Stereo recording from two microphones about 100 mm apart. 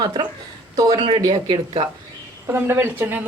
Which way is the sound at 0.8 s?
45° right (ahead or behind).